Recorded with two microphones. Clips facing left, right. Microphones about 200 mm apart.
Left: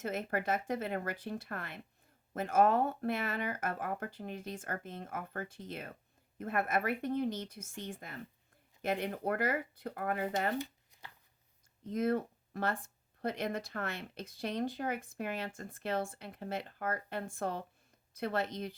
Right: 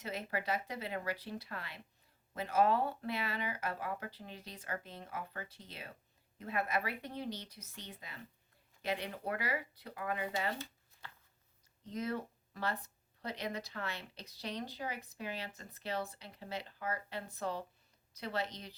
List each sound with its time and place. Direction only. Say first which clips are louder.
0.0 s speech: left 4 dB; 50° left (ahead or behind)
10.6 s shuffling cards: left 7 dB; 15° left (ahead or behind)
11.8 s speech: left 7 dB; 50° left (ahead or behind)